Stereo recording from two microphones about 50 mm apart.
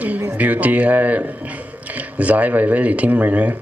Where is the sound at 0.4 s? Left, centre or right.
Right.